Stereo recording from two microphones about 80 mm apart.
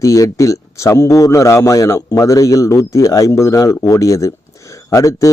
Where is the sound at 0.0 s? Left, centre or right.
Left.